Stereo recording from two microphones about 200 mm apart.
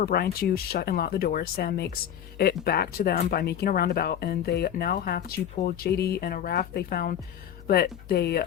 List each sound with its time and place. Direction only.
0.0 s speech: 50° left (ahead or behind)